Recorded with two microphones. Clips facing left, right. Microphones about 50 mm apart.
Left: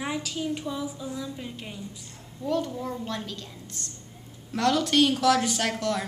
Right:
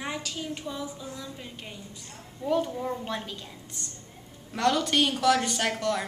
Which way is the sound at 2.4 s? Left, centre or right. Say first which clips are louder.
Right 1 dB; centre.